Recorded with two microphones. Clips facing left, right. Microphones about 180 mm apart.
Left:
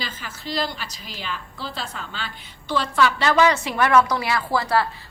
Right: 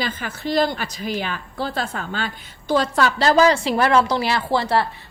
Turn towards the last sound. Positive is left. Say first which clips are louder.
# right 2 dB
turn(degrees=-25)  # may be behind; listen again after turning